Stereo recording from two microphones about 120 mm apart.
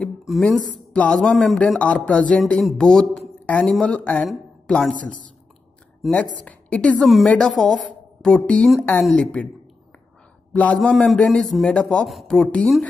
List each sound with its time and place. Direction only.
0.0 s a sound: centre (ahead or behind)
0.9 s a woman's voice: 10° left (ahead or behind)
6.3 s a woman's voice: 10° left (ahead or behind)
10.5 s a man's voice: 10° left (ahead or behind)